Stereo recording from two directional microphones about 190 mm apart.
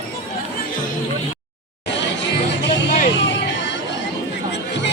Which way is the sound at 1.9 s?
70° left (ahead or behind).